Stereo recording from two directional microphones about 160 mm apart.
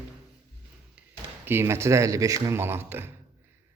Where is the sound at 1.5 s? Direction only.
15° right (ahead or behind).